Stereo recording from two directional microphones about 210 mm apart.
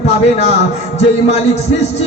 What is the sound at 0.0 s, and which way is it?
Speech, 30° left (ahead or behind).